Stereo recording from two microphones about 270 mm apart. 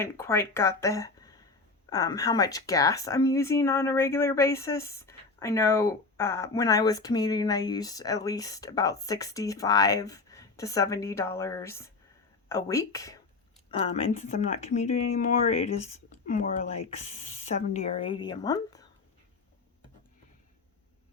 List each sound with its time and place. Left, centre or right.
0.0 s speech: centre